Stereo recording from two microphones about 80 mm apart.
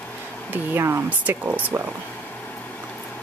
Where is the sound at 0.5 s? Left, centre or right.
Right.